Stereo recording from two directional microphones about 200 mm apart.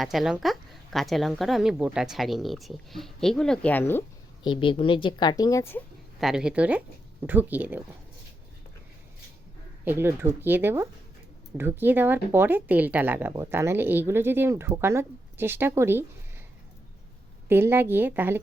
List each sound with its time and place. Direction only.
0.0 s a woman's voice: centre (ahead or behind)
4.4 s a woman's voice: 25° left (ahead or behind)
6.1 s a woman's voice: centre (ahead or behind)
9.8 s speech: 10° right (ahead or behind)
17.5 s speech: 10° right (ahead or behind)